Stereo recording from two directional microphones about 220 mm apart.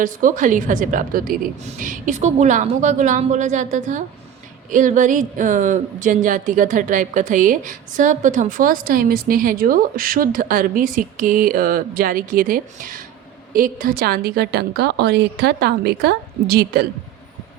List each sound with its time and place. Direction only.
0.0 s a woman's voice: 35° right (ahead or behind)